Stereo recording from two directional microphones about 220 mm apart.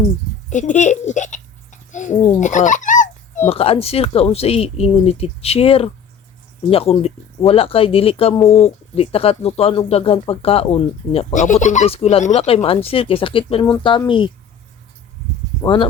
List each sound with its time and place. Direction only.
0.5 s a sound: 35° left (ahead or behind)
3.5 s speech: 25° left (ahead or behind)
15.6 s speech: 20° left (ahead or behind)